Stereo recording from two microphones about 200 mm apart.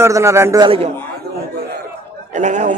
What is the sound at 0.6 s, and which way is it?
Speech, 30° right (ahead or behind).